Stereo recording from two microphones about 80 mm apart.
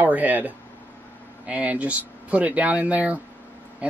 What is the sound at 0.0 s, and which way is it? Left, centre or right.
Speech, right.